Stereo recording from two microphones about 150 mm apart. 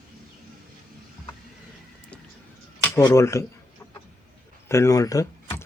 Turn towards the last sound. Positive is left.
turn(degrees=20)  # may be behind; listen again after turning